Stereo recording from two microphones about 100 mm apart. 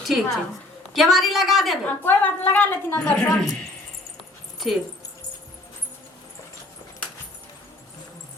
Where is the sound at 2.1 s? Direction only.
20° left (ahead or behind).